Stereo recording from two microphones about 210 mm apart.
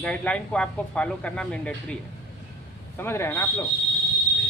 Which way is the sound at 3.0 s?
10° left (ahead or behind).